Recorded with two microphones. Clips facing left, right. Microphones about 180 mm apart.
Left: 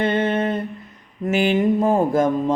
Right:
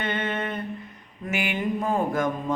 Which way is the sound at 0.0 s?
35° left (ahead or behind).